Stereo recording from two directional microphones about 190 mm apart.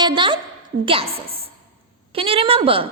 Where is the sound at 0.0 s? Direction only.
25° right (ahead or behind).